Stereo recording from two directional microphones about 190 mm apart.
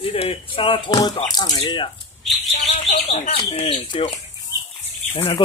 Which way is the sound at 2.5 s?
35° left (ahead or behind).